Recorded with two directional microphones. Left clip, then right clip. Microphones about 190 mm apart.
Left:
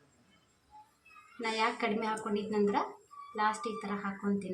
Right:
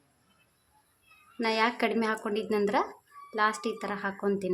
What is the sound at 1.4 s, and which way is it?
A woman's voice, 65° right (ahead or behind).